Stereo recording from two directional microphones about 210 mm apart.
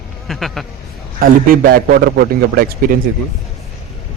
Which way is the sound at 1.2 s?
45° right (ahead or behind).